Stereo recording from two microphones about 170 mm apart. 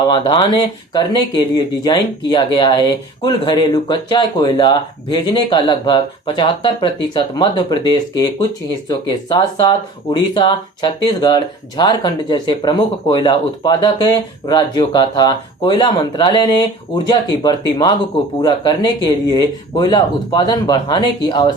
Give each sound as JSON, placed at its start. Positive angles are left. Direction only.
{"t": 0.1, "sound": "speech", "side_deg": 25}